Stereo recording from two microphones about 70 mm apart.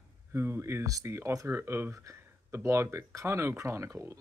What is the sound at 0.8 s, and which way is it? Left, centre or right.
Speech, right.